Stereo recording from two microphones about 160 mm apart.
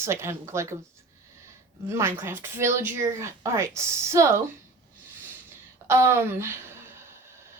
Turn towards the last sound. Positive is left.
turn(degrees=-15)  # may be behind; listen again after turning